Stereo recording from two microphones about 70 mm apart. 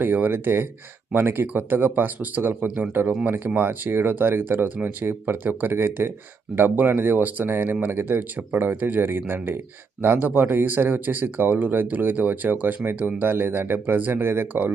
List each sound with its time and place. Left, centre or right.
0.0 s speech: right